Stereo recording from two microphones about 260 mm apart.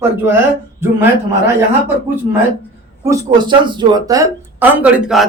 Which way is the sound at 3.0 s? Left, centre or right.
Centre.